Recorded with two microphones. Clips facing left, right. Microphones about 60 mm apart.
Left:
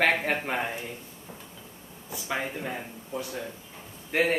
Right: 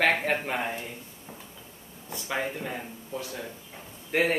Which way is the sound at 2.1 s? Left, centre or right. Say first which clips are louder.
Right 1 dB; centre.